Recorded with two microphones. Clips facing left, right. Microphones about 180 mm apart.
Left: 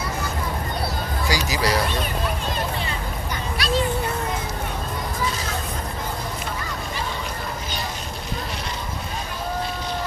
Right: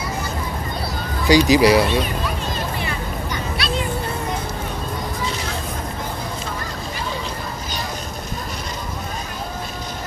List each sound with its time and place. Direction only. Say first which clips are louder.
1.3 s speech: right 11 dB; 15° right (ahead or behind)
3.5 s music: left 3 dB; 40° left (ahead or behind)